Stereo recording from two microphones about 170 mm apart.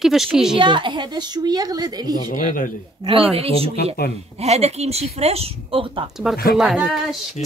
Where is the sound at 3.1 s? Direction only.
35° right (ahead or behind).